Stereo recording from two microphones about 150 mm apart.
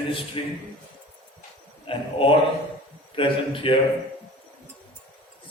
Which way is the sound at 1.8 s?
35° left (ahead or behind).